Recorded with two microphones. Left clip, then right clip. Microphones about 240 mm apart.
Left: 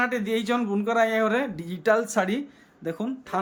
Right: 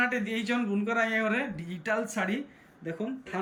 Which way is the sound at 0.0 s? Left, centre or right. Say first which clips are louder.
Left 4 dB; centre.